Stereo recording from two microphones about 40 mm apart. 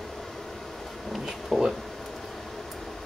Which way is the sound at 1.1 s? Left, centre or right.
Centre.